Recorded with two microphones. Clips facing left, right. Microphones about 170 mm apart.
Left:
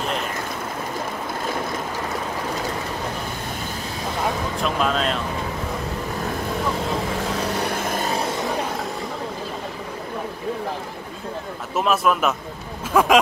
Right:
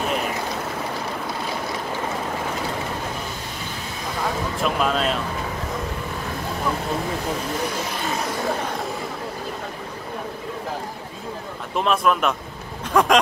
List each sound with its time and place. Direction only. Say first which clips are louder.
4.6 s speech: right 2 dB; 5° right (ahead or behind)
7.5 s vehicle: left 2 dB; 50° left (ahead or behind)
11.7 s speech: even; 5° left (ahead or behind)